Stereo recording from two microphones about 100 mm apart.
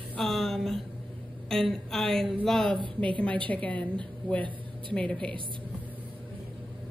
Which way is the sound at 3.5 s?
15° left (ahead or behind).